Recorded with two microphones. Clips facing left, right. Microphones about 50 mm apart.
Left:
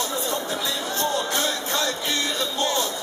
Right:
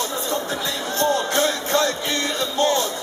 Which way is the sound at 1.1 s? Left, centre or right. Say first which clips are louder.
Right 4 dB; right.